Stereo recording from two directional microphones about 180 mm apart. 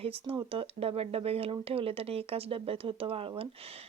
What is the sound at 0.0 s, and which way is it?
Speech, 30° right (ahead or behind).